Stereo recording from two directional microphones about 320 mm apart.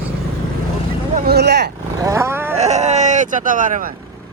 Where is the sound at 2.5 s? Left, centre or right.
Right.